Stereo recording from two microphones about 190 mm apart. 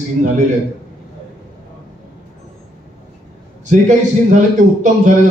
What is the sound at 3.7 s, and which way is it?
Speech, 40° right (ahead or behind).